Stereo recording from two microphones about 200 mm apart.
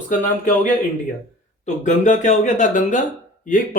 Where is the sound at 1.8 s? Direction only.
35° left (ahead or behind).